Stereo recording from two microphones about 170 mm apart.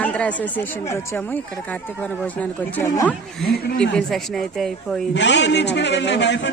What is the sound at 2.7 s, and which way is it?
A woman's voice, 10° left (ahead or behind).